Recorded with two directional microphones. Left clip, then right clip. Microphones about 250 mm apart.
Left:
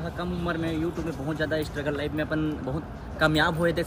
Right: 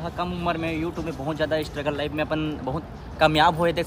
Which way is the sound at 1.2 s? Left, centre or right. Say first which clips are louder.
Right 4 dB; right.